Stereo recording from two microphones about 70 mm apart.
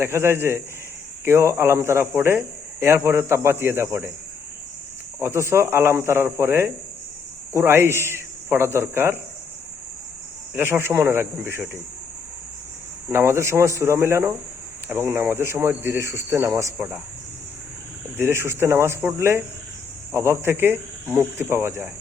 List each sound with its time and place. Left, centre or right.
0.0 s speech: right
5.2 s speech: right
10.5 s speech: right
13.1 s speech: right
16.7 s speech: right
18.2 s speech: right